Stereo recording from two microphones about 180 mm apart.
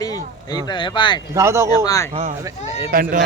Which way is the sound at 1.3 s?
15° right (ahead or behind).